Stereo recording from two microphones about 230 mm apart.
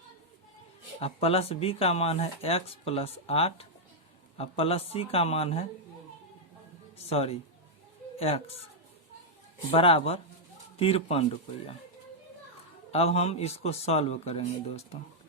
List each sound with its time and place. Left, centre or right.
0.9 s speech: left
7.0 s speech: left
9.7 s speech: left
12.9 s speech: left